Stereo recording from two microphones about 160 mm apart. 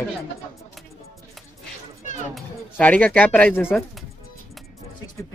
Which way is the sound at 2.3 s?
10° left (ahead or behind).